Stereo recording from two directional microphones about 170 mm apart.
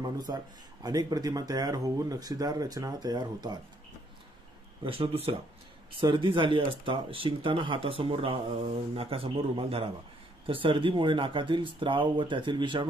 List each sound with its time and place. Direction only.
0.3 s speech: 20° right (ahead or behind)
4.8 s speech: 35° right (ahead or behind)